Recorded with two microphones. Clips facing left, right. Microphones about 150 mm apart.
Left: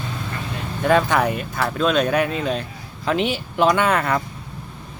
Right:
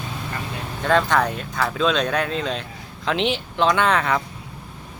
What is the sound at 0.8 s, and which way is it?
Speech, 10° left (ahead or behind).